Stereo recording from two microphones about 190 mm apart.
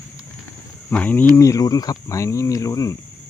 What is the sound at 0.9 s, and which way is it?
Speech, 10° left (ahead or behind).